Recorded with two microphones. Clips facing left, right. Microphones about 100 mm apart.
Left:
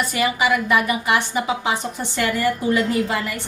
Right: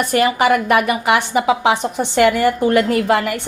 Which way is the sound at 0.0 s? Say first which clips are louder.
Right 5 dB; 55° right (ahead or behind).